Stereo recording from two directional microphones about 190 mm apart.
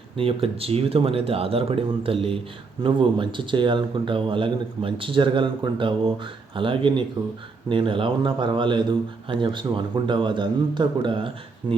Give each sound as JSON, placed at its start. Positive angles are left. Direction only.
{"t": 0.2, "sound": "speech", "side_deg": -30}